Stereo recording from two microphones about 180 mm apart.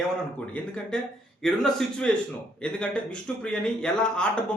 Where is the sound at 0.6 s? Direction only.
10° left (ahead or behind).